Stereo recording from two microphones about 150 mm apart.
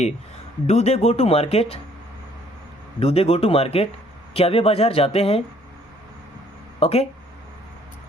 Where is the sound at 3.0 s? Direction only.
45° left (ahead or behind).